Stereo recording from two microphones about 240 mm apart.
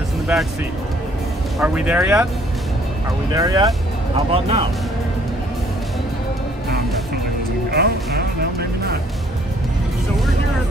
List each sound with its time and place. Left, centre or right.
1.6 s speech: centre
3.3 s speech: centre
7.7 s music: right